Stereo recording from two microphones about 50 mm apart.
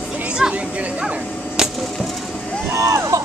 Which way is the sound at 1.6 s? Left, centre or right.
Centre.